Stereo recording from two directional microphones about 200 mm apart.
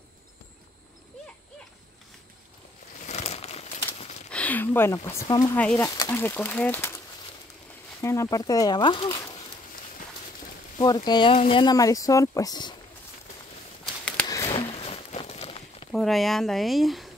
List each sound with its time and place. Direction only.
3.1 s crumpling: 35° left (ahead or behind)
4.3 s speech: 5° left (ahead or behind)
8.0 s speech: 15° left (ahead or behind)
10.8 s speech: 20° left (ahead or behind)
14.2 s a sound: 20° left (ahead or behind)
14.7 s a sound: 30° left (ahead or behind)
15.9 s speech: centre (ahead or behind)